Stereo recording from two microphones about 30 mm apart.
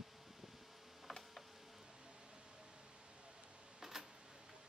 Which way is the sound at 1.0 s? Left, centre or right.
Centre.